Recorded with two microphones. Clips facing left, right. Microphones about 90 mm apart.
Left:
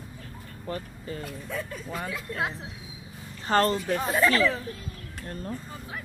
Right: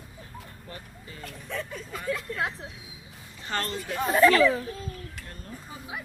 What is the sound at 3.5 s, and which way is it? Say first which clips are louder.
Speech: left 9 dB; 40° left (ahead or behind).